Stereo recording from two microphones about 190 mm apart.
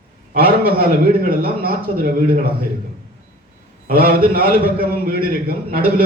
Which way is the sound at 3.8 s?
50° right (ahead or behind).